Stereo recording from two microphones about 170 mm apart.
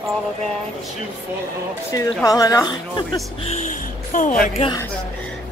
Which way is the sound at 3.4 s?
45° left (ahead or behind).